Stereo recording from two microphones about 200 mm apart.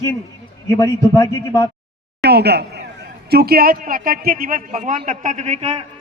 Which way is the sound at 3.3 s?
50° right (ahead or behind).